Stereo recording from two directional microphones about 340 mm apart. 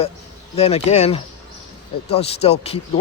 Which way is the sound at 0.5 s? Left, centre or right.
Centre.